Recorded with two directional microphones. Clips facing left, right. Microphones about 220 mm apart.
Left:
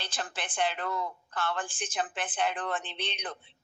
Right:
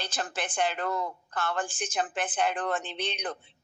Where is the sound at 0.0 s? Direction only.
45° right (ahead or behind).